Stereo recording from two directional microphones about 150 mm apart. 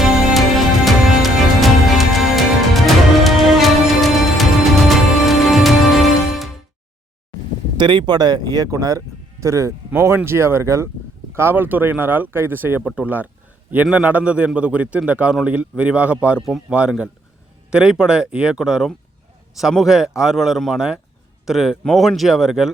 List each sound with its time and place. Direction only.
0.0 s music: centre (ahead or behind)
7.8 s a man's voice: 30° right (ahead or behind); by 22.7 s 5° right (ahead or behind)